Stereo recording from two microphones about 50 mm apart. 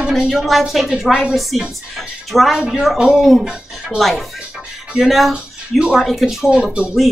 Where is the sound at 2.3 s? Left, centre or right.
Centre.